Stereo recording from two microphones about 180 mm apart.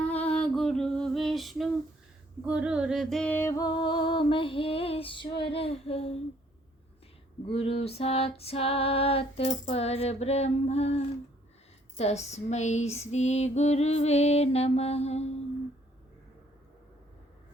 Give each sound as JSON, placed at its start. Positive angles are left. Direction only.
{"t": 0.0, "sound": "female singing", "side_deg": 5}
{"t": 2.4, "sound": "music", "side_deg": -5}
{"t": 5.4, "sound": "female singing", "side_deg": 30}
{"t": 7.4, "sound": "female singing", "side_deg": 30}